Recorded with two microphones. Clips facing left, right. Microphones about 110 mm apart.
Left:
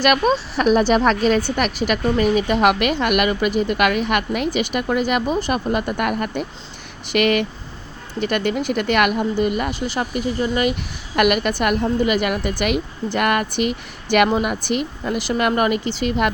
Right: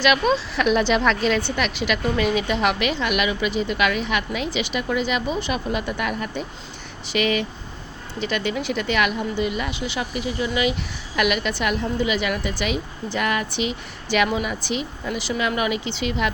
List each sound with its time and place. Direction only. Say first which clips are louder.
0.0 s a woman's voice: left 2 dB; 45° left (ahead or behind)